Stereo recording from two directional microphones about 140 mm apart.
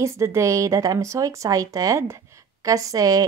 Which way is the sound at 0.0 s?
20° right (ahead or behind).